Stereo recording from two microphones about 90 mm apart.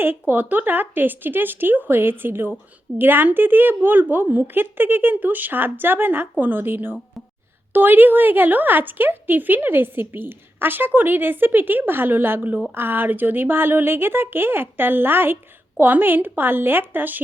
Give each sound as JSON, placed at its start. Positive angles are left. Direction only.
{"t": 0.0, "sound": "a woman's voice", "side_deg": -25}